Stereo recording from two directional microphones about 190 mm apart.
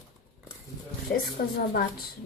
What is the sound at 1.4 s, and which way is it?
Speech, 55° left (ahead or behind).